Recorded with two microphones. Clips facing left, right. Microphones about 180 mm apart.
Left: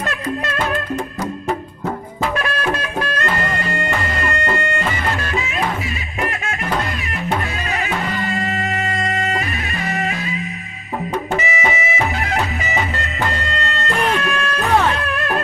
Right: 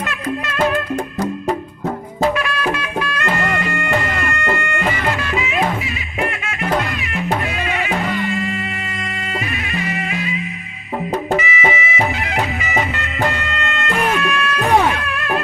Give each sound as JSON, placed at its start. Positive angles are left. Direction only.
{"t": 2.3, "sound": "music", "side_deg": 40}
{"t": 3.7, "sound": "bagpipes", "side_deg": 35}
{"t": 4.4, "sound": "music", "side_deg": 35}
{"t": 7.7, "sound": "music", "side_deg": 40}
{"t": 11.4, "sound": "music", "side_deg": 40}
{"t": 13.0, "sound": "music", "side_deg": 40}
{"t": 14.7, "sound": "music", "side_deg": -15}